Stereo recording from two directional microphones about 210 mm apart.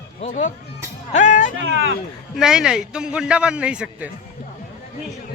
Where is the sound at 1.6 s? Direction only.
65° right (ahead or behind).